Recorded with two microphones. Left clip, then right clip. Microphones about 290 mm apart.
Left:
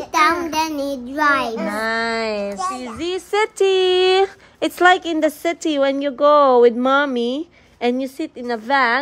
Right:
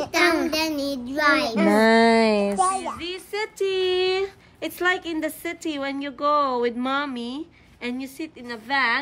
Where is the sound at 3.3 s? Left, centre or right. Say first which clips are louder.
Left 9 dB; left.